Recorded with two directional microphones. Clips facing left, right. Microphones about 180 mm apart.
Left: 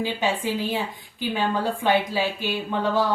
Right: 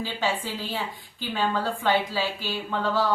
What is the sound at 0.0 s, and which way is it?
Speech, 15° left (ahead or behind).